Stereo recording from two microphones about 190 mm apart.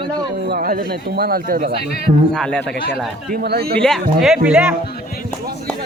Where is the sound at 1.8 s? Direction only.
55° left (ahead or behind).